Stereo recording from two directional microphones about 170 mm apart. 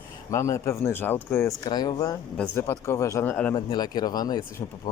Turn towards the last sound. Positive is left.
turn(degrees=25)  # may be behind; listen again after turning